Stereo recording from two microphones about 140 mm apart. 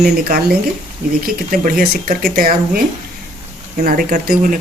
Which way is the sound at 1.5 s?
80° right.